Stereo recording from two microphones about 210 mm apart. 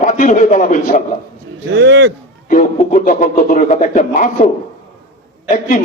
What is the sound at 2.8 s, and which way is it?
A man's voice, 40° left (ahead or behind).